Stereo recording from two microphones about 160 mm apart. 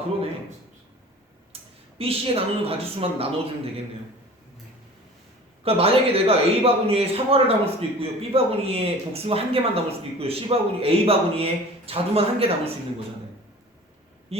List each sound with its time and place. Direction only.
1.5 s a sound: 35° right (ahead or behind)
2.0 s a man's voice: 35° right (ahead or behind)
5.6 s a man's voice: 35° right (ahead or behind)